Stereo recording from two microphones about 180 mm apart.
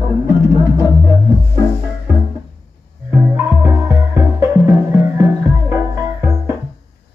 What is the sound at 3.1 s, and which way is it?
Music, 15° right (ahead or behind).